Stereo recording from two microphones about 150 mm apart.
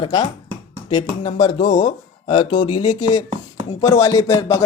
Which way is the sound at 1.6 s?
60° left (ahead or behind).